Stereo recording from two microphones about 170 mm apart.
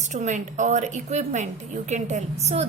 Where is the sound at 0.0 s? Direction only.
45° right (ahead or behind).